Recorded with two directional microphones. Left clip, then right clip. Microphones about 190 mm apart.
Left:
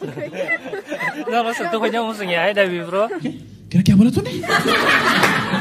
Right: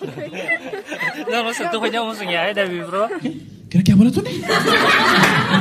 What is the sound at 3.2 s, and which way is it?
Speech, centre (ahead or behind).